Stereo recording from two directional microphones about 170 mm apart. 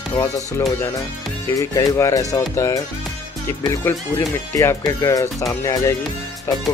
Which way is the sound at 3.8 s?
15° left (ahead or behind).